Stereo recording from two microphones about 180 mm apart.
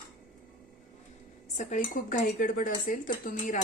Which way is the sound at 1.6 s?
45° left (ahead or behind).